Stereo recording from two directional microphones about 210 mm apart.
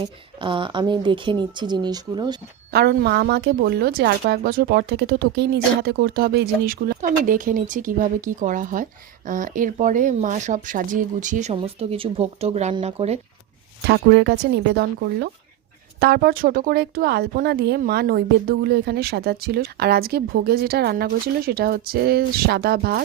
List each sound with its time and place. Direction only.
0.4 s speech: 25° right (ahead or behind)
2.7 s speech: 50° right (ahead or behind); by 13.1 s 30° right (ahead or behind)
13.8 s speech: 55° right (ahead or behind)